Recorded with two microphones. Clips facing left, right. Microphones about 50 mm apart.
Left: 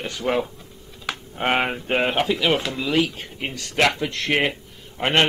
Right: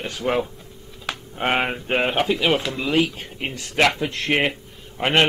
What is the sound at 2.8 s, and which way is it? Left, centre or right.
Speech, centre.